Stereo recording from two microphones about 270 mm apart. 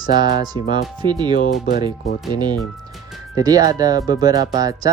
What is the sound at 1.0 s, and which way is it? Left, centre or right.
Speech, centre.